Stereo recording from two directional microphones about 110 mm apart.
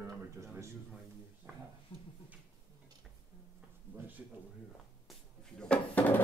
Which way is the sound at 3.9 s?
15° right (ahead or behind).